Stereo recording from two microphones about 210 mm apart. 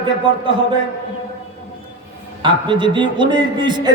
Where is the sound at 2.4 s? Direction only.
25° right (ahead or behind).